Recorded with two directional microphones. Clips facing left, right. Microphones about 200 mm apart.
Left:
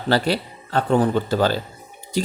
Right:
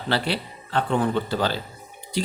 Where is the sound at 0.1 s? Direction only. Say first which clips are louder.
Left 5 dB; 40° left (ahead or behind).